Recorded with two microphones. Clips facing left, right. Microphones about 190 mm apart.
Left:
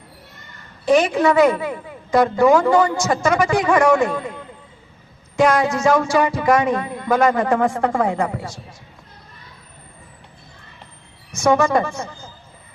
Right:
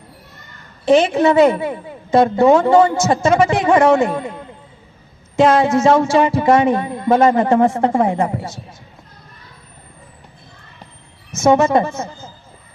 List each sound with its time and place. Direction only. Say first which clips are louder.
0.9 s a man's voice: right 3 dB; 25° right (ahead or behind)
5.4 s a man's voice: right 4 dB; 25° right (ahead or behind)
11.3 s a man's voice: right 3 dB; 25° right (ahead or behind)